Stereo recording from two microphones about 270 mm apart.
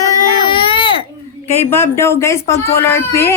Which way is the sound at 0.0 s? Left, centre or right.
Centre.